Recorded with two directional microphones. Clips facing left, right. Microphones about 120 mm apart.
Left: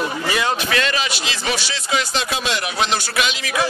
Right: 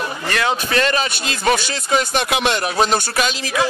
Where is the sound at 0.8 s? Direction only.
40° right (ahead or behind).